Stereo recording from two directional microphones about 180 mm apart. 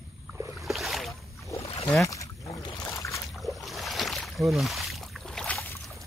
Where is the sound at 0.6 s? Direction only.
Centre (ahead or behind).